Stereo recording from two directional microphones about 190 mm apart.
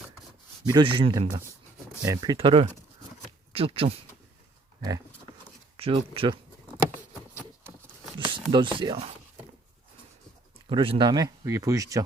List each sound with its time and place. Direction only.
0.7 s speech: 25° right (ahead or behind)
5.7 s speech: 30° right (ahead or behind)
7.3 s a sound: 15° right (ahead or behind)
8.2 s speech: 25° right (ahead or behind)
10.7 s speech: 25° right (ahead or behind)